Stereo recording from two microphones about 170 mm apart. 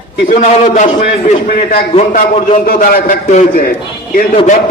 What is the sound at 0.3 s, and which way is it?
Speech, 45° left (ahead or behind).